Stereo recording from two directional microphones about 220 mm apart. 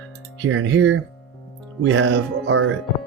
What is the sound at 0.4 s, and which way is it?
Speech, 60° right (ahead or behind).